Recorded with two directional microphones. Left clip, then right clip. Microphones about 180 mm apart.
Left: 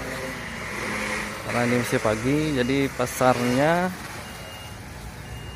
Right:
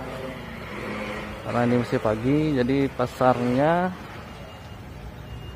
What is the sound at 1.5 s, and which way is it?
Speech, centre (ahead or behind).